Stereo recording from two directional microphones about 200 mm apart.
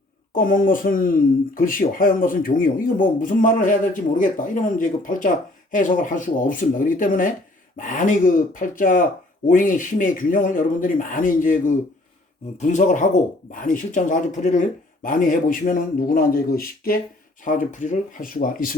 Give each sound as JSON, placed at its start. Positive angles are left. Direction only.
{"t": 0.3, "sound": "speech", "side_deg": 45}